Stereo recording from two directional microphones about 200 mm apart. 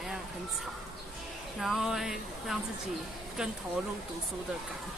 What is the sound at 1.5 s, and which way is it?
Speech, centre (ahead or behind).